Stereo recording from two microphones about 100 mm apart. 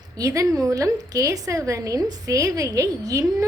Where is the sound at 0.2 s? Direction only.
35° right (ahead or behind).